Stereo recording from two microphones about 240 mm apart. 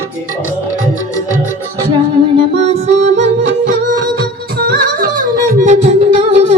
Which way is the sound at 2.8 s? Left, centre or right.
Right.